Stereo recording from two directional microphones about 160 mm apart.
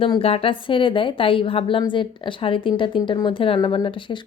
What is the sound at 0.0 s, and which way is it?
A woman's voice, 35° left (ahead or behind).